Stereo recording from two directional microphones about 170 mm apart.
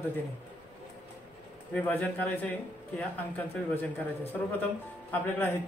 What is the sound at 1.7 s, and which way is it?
Speech, 10° left (ahead or behind).